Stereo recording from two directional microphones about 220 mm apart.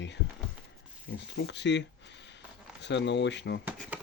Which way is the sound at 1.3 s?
50° left (ahead or behind).